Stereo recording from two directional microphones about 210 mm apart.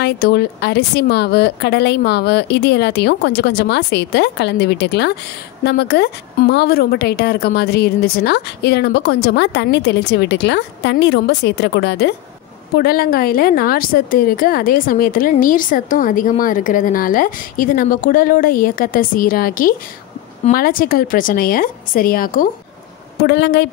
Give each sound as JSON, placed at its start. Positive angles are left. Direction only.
{"t": 0.0, "sound": "a woman's voice", "side_deg": 50}
{"t": 12.7, "sound": "a woman's voice", "side_deg": 45}
{"t": 23.2, "sound": "a woman's voice", "side_deg": 55}